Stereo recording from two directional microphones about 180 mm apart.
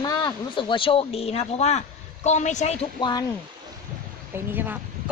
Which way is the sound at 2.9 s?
25° left (ahead or behind).